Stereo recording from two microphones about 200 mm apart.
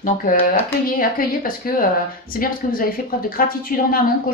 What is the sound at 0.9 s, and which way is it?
Speech, 45° left (ahead or behind).